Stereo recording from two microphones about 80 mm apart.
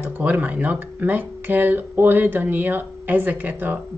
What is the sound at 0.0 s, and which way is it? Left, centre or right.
Speech, right.